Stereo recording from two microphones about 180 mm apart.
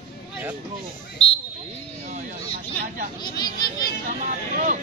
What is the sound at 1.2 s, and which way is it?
Speech, 30° left (ahead or behind).